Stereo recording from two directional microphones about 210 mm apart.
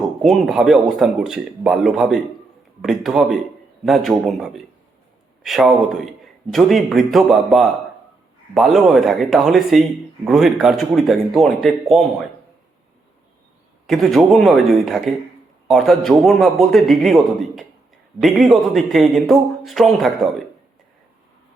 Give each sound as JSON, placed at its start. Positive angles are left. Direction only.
{"t": 0.0, "sound": "speech", "side_deg": 0}
{"t": 13.8, "sound": "speech", "side_deg": 0}